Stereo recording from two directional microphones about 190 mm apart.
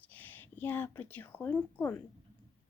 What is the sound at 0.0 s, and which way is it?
A woman's voice, 10° left (ahead or behind).